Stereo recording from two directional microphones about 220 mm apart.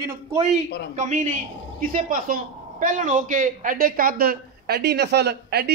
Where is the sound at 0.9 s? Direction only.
35° right (ahead or behind).